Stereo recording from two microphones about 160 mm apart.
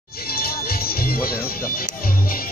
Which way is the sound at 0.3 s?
70° left (ahead or behind).